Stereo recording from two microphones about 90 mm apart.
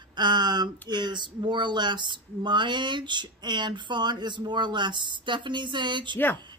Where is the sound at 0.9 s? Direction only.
55° right (ahead or behind).